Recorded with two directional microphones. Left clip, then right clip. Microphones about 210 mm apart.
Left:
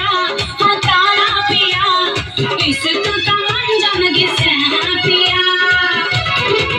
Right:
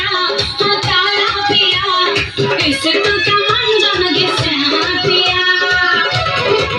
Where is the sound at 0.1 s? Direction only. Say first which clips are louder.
Right 1 dB; 60° left (ahead or behind).